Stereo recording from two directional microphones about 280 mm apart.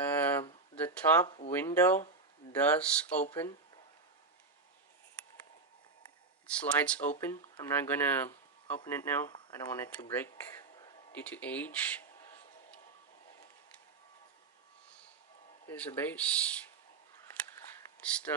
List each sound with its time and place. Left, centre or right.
0.0 s a sound: centre
0.8 s speech: centre
6.4 s speech: centre
15.6 s speech: centre
18.0 s speech: centre